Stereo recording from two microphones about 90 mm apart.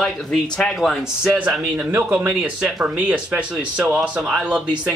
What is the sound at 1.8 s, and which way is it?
A man's voice, 15° right (ahead or behind).